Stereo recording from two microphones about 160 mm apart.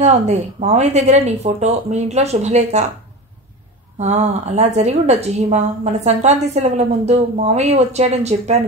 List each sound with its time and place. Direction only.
0.0 s a woman's voice: 45° right (ahead or behind)
4.0 s a woman's voice: 45° right (ahead or behind)